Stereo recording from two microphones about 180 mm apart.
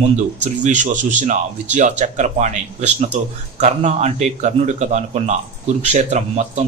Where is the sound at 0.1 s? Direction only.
40° right (ahead or behind).